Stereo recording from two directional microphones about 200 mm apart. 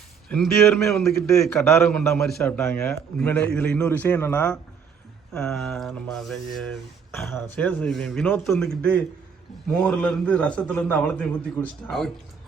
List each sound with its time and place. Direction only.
0.3 s speech: centre (ahead or behind)
2.4 s a man's voice: 15° left (ahead or behind)